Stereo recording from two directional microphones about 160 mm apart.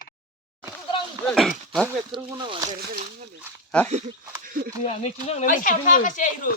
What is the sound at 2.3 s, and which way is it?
Speech, 30° right (ahead or behind).